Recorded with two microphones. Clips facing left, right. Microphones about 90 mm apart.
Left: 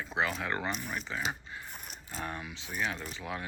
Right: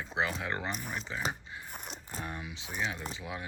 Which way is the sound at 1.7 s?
20° right (ahead or behind).